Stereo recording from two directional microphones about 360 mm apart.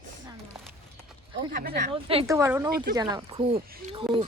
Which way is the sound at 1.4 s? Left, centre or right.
Right.